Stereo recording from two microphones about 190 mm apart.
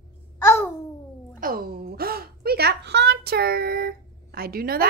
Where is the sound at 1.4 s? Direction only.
50° right (ahead or behind).